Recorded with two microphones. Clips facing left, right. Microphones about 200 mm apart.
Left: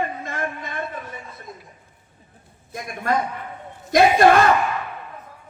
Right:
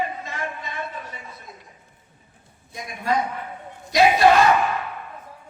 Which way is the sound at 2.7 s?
50° left (ahead or behind).